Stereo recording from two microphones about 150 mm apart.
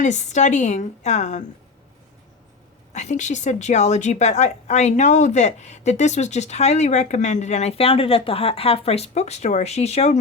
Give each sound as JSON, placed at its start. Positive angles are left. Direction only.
{"t": 0.0, "sound": "speech", "side_deg": 50}
{"t": 2.9, "sound": "speech", "side_deg": 50}